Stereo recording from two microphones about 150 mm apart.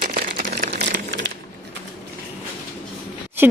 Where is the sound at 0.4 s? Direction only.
60° right (ahead or behind).